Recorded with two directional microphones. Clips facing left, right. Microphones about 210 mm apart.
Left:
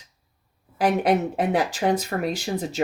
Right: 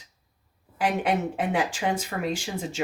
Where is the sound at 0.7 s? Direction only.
40° left (ahead or behind).